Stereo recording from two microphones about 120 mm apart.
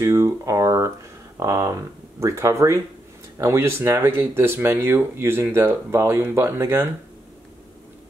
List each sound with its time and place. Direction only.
0.0 s speech: 25° right (ahead or behind)